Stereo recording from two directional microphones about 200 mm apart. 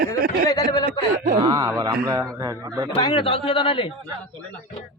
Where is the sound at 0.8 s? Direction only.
40° right (ahead or behind).